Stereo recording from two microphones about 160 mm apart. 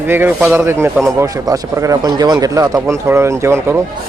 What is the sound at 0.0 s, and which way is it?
A man's voice, 15° right (ahead or behind).